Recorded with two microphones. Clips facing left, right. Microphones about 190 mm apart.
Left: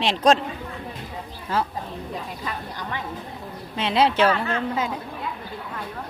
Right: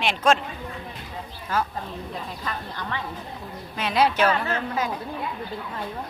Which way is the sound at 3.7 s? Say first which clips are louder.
Left 2 dB; 25° left (ahead or behind).